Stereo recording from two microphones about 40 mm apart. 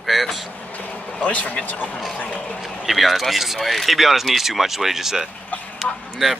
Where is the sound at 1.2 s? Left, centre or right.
Left.